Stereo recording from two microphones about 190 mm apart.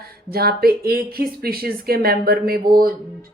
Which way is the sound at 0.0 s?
55° right (ahead or behind).